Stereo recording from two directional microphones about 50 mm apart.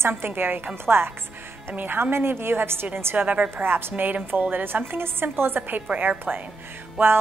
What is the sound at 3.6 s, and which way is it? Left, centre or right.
A woman's voice, right.